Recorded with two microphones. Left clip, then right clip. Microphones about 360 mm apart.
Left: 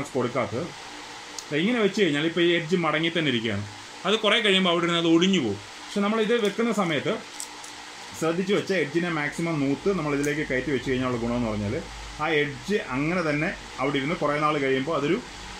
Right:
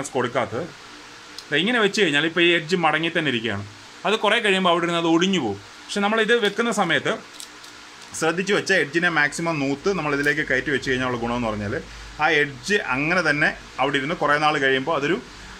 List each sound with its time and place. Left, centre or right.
0.1 s speech: right
1.5 s speech: right
8.2 s speech: right